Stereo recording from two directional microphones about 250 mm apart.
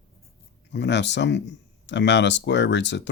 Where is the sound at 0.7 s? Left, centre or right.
Left.